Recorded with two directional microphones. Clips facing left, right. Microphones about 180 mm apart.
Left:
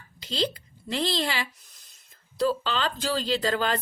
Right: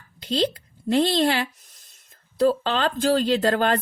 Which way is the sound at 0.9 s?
50° right (ahead or behind).